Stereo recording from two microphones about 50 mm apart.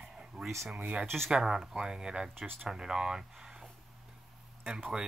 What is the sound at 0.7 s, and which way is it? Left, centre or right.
Speech, right.